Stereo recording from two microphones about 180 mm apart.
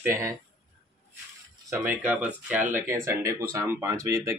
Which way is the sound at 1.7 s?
10° right (ahead or behind).